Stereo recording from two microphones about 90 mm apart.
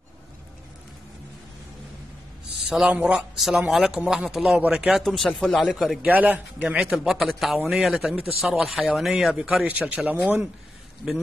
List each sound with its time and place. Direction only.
2.9 s speech: 10° right (ahead or behind)
6.0 s speech: 20° right (ahead or behind)
9.7 s speech: 15° right (ahead or behind)